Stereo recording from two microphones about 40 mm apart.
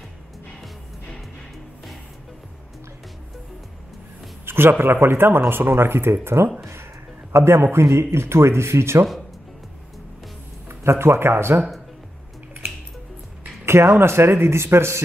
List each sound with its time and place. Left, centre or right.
4.5 s speech: right
6.2 s speech: right
10.7 s a man's voice: right
13.7 s speech: right